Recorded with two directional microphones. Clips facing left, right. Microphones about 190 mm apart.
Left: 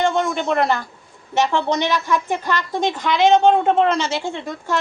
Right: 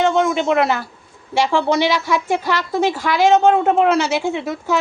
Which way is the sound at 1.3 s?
10° right (ahead or behind).